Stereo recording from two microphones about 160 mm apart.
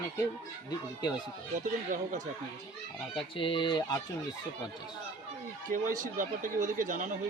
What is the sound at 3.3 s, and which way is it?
Speech, 30° left (ahead or behind).